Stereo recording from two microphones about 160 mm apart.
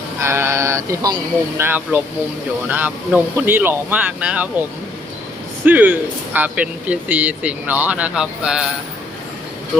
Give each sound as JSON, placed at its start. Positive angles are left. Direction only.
{"t": 0.2, "sound": "speech", "side_deg": -15}
{"t": 5.6, "sound": "speech", "side_deg": -10}